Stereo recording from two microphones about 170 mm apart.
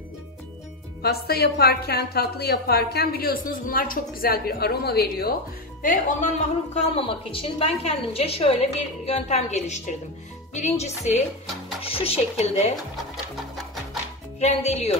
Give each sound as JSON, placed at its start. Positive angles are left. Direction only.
{"t": 1.0, "sound": "a woman's voice", "side_deg": 65}
{"t": 5.8, "sound": "speech", "side_deg": 50}
{"t": 7.0, "sound": "a woman's voice", "side_deg": 30}
{"t": 12.9, "sound": "music", "side_deg": 0}
{"t": 14.4, "sound": "a woman's voice", "side_deg": 40}